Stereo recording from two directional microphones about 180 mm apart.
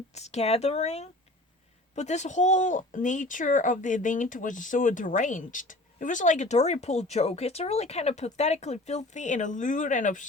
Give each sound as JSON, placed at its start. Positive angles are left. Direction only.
{"t": 0.1, "sound": "speech", "side_deg": 35}